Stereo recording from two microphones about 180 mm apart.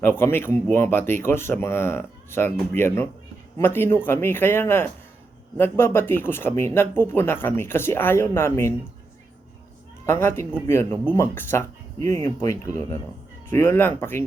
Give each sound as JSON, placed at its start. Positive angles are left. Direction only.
{"t": 0.0, "sound": "speech", "side_deg": 10}
{"t": 10.1, "sound": "speech", "side_deg": 15}